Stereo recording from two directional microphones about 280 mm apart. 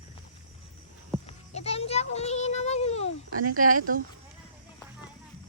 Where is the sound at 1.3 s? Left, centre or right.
Left.